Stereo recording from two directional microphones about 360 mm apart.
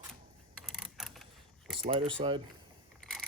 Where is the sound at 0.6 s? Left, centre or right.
Centre.